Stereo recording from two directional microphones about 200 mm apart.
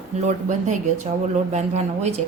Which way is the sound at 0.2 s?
35° right (ahead or behind).